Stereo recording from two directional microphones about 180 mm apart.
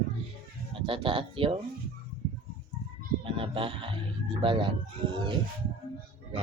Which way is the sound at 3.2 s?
30° right (ahead or behind).